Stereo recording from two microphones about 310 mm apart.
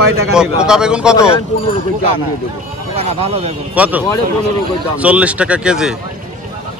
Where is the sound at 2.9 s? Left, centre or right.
Centre.